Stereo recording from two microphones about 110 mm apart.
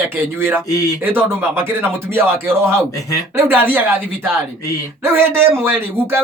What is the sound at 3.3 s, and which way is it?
Speech, 20° right (ahead or behind).